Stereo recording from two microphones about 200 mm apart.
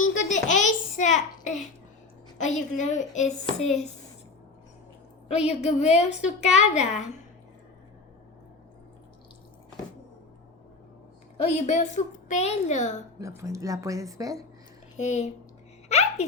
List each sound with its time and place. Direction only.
0.0 s a sound: 40° left (ahead or behind)
2.4 s a woman's voice: 35° left (ahead or behind)
5.5 s a woman's voice: 35° left (ahead or behind)
11.3 s a woman's voice: 35° left (ahead or behind)
13.1 s a woman's voice: 15° right (ahead or behind)
14.9 s a woman's voice: 35° left (ahead or behind)
15.9 s a sound: 30° left (ahead or behind)